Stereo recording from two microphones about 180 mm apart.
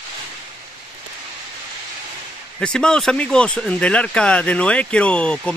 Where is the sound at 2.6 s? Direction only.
5° left (ahead or behind).